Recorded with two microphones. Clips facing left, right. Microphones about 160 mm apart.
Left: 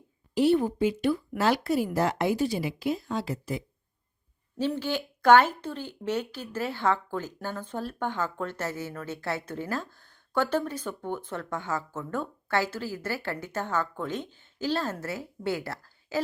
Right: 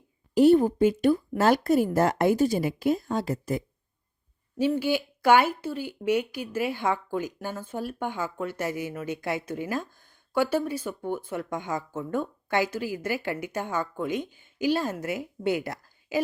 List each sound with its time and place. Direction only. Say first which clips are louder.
0.3 s a woman's voice: right 5 dB; 45° right (ahead or behind)
4.5 s speech: right 4 dB; 10° right (ahead or behind)